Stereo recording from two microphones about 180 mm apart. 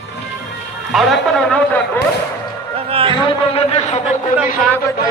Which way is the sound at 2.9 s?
30° right (ahead or behind).